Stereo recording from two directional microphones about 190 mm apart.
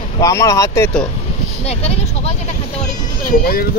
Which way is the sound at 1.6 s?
35° left (ahead or behind).